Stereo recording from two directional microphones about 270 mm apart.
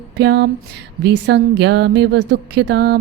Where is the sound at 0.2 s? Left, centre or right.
Right.